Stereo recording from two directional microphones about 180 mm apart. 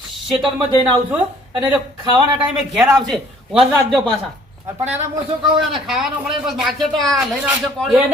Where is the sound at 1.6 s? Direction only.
25° right (ahead or behind).